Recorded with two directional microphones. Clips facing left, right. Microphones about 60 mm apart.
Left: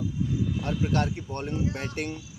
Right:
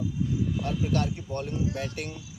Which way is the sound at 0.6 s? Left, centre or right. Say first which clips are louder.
Left 3 dB; left.